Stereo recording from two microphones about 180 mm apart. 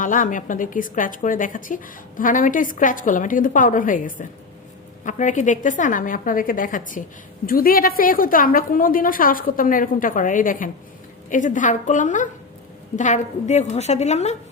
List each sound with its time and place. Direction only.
0.0 s a woman's voice: 45° left (ahead or behind)